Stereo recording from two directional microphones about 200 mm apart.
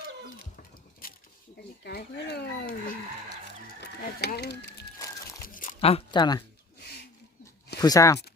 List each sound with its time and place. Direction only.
1.8 s speech: 55° left (ahead or behind)
4.9 s music: 15° left (ahead or behind)
5.5 s a sound: 35° left (ahead or behind)
7.8 s speech: 15° left (ahead or behind)